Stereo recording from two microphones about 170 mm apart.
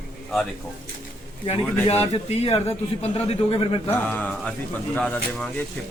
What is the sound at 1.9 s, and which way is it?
A man's voice, 35° left (ahead or behind).